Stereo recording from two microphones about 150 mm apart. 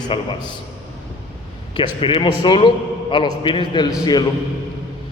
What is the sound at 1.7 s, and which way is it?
A man's voice, 35° left (ahead or behind).